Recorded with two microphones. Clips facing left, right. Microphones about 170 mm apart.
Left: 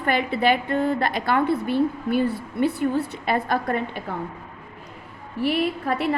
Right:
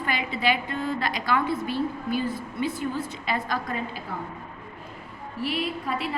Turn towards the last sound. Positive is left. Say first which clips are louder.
# left 5 dB
turn(degrees=60)  # may be behind; listen again after turning